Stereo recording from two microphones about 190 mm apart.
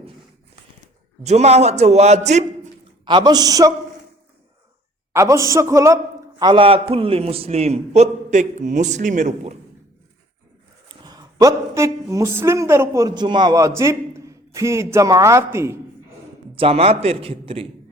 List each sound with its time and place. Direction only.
1.2 s a man's voice: 35° right (ahead or behind)
3.0 s a man's voice: 25° right (ahead or behind)
5.1 s a man's voice: 15° right (ahead or behind)
6.4 s a man's voice: 25° right (ahead or behind)
11.0 s speech: 20° right (ahead or behind)
16.6 s a man's voice: 30° right (ahead or behind)